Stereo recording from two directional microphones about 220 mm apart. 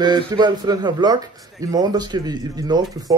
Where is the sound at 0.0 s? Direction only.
20° right (ahead or behind).